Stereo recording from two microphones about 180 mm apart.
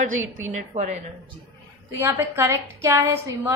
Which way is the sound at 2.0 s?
15° right (ahead or behind).